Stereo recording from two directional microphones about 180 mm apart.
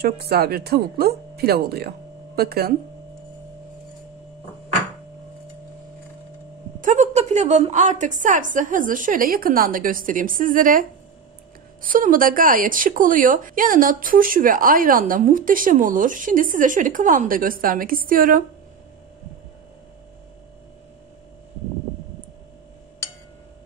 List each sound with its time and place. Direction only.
0.0 s speech: 60° right (ahead or behind)
6.8 s speech: 45° right (ahead or behind)